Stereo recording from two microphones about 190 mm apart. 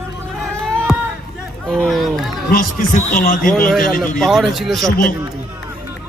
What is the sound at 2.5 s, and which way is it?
Speech, 50° left (ahead or behind).